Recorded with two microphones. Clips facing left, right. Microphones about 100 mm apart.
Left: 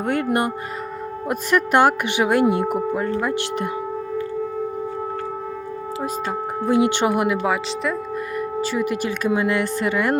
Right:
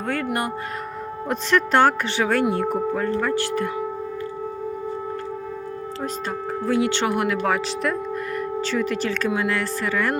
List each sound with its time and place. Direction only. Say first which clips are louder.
0.0 s speech: left 4 dB; 20° left (ahead or behind)
1.3 s speech: left 1 dB; 10° left (ahead or behind)
6.7 s speech: left 3 dB; 20° left (ahead or behind)
7.4 s speech: even; 5° left (ahead or behind); by 10.2 s 20° left (ahead or behind)